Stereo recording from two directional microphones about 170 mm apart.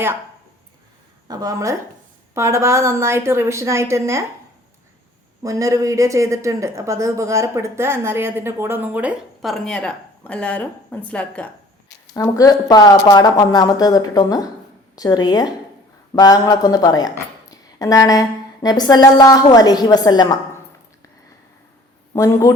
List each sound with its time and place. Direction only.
1.3 s speech: 20° right (ahead or behind)
5.4 s speech: 20° right (ahead or behind); by 11.4 s 10° left (ahead or behind)
12.1 s a woman's voice: 20° left (ahead or behind)
22.1 s a man's voice: 20° left (ahead or behind)